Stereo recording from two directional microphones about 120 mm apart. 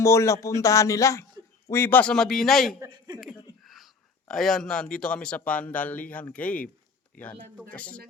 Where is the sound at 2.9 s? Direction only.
35° right (ahead or behind).